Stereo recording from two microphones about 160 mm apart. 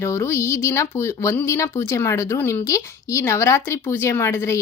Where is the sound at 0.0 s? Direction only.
15° left (ahead or behind).